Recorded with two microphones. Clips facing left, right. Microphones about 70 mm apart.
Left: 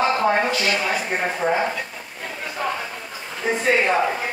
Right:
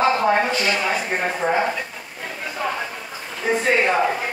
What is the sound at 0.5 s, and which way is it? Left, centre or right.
Speech, right.